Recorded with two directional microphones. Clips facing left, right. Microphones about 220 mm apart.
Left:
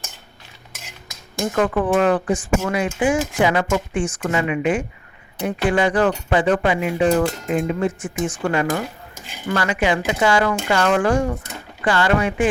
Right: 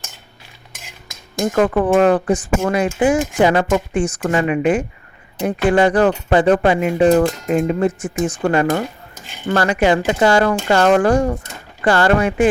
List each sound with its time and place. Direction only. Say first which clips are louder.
1.4 s speech: right 4 dB; 40° right (ahead or behind)